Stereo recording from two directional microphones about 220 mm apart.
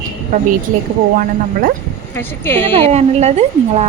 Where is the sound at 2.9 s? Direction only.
30° right (ahead or behind).